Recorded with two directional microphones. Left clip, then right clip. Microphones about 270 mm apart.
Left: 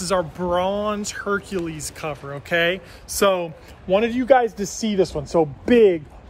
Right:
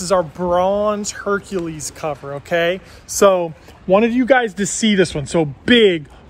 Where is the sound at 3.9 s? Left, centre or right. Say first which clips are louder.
Right 3 dB; right.